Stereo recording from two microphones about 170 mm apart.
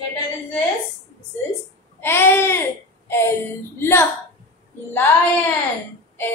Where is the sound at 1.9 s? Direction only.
15° left (ahead or behind).